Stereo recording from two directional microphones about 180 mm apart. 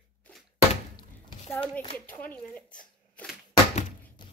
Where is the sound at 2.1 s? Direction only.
10° left (ahead or behind).